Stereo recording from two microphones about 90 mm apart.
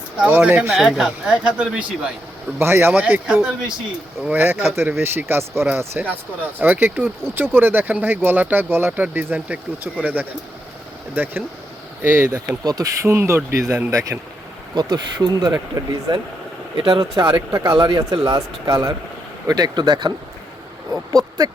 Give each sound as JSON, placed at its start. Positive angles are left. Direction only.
{"t": 0.2, "sound": "speech", "side_deg": -15}
{"t": 0.8, "sound": "speech", "side_deg": -5}
{"t": 2.6, "sound": "speech", "side_deg": -25}
{"t": 12.3, "sound": "speech", "side_deg": -45}
{"t": 14.8, "sound": "speech", "side_deg": -55}
{"t": 16.7, "sound": "speech", "side_deg": -70}
{"t": 18.3, "sound": "speech", "side_deg": -55}